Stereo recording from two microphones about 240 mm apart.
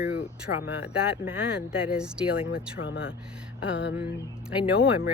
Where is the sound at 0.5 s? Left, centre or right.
Left.